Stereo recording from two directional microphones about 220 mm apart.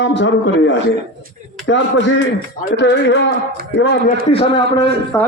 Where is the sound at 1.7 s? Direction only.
60° left (ahead or behind).